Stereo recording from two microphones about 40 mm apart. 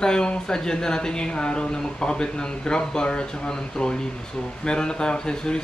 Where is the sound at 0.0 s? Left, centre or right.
Centre.